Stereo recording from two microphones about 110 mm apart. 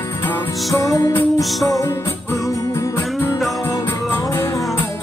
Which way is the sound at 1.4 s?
Centre (ahead or behind).